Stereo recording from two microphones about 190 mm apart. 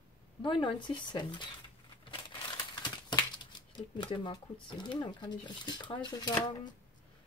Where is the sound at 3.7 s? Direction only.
25° left (ahead or behind).